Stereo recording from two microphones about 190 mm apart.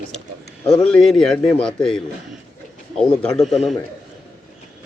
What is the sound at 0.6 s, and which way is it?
A man's voice, 5° left (ahead or behind).